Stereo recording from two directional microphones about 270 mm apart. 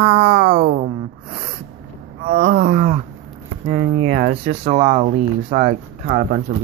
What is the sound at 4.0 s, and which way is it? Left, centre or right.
Wild animals, right.